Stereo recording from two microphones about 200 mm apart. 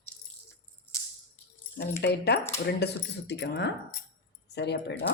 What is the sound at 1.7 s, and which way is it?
Speech, 55° left (ahead or behind).